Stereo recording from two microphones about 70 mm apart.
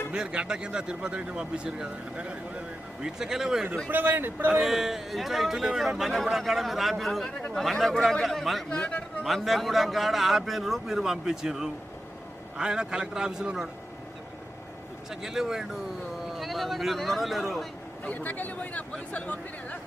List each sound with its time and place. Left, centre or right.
0.1 s a man's voice: centre
3.8 s speech: right
4.6 s a man's voice: centre
8.7 s a man's voice: centre
9.2 s a man's voice: centre
15.1 s a man's voice: centre
18.0 s speech: left